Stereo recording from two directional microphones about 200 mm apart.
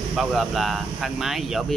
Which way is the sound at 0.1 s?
Centre (ahead or behind).